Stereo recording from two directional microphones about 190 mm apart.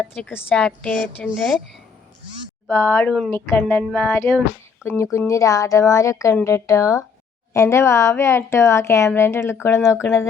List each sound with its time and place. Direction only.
0.0 s a woman's voice: 10° left (ahead or behind)
2.6 s a woman's voice: 10° left (ahead or behind)